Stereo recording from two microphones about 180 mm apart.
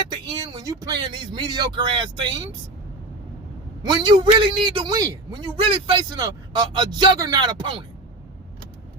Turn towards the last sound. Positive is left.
turn(degrees=-25)  # may be behind; listen again after turning